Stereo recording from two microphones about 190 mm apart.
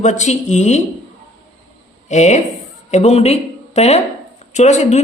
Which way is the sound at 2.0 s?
35° left (ahead or behind).